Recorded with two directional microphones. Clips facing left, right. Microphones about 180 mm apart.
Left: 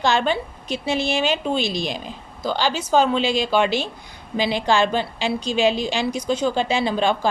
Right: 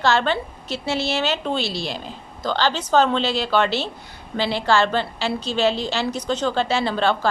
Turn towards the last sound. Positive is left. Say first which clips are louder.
# even
turn(degrees=15)  # may be behind; listen again after turning